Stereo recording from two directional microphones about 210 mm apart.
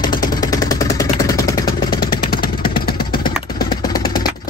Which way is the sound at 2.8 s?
20° left (ahead or behind).